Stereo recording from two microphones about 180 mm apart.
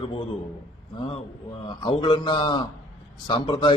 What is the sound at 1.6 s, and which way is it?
Speech, 25° left (ahead or behind).